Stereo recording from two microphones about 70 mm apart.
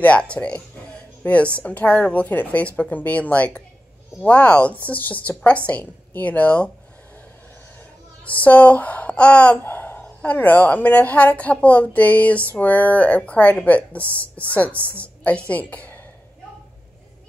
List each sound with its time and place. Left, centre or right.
0.0 s a woman's voice: centre
8.3 s a woman's voice: left